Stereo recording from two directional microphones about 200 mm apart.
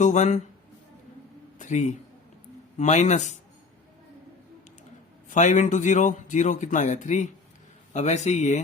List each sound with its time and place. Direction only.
0.0 s speech: 35° left (ahead or behind)
1.5 s a man's voice: 35° left (ahead or behind)
5.3 s speech: 40° left (ahead or behind)